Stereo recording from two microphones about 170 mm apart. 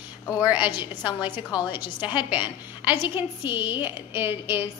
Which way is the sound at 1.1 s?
25° left (ahead or behind).